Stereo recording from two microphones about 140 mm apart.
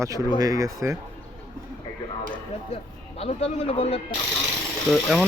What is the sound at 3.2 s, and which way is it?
Speech, 45° left (ahead or behind).